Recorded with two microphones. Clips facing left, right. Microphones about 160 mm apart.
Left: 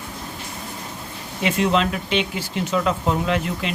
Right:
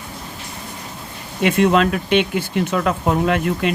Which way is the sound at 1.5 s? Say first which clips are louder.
Right 5 dB; 60° right (ahead or behind).